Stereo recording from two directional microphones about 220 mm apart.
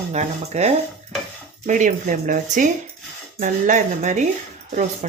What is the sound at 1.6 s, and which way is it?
Speech, 35° right (ahead or behind).